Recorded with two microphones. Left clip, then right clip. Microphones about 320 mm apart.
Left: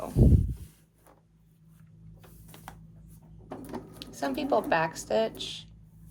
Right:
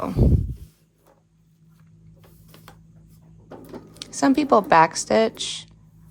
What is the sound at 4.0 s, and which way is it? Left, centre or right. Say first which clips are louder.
A woman's voice: right 12 dB; right.